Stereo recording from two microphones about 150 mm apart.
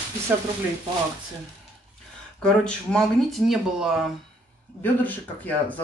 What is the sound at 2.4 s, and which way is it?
Speech, 5° left (ahead or behind).